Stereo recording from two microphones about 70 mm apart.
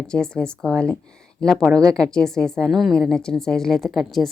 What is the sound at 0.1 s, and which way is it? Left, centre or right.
A woman's voice, centre.